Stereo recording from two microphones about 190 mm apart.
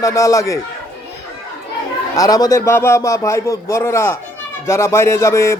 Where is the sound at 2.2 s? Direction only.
20° left (ahead or behind).